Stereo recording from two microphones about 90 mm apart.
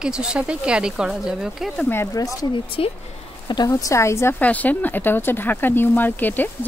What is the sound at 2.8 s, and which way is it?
Speech, 90° left.